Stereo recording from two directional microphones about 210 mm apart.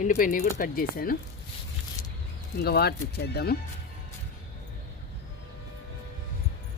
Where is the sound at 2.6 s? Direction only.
50° left (ahead or behind).